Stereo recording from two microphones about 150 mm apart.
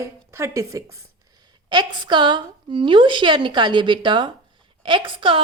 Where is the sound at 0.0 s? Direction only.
20° right (ahead or behind).